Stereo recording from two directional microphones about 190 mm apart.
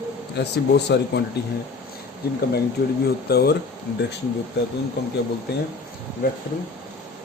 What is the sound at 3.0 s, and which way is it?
Speech, 55° left (ahead or behind).